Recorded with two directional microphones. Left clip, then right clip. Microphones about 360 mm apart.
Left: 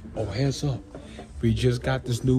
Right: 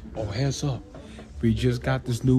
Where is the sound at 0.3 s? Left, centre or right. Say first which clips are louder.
Even; right.